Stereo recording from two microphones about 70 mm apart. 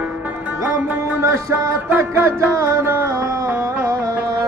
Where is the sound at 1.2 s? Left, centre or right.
Right.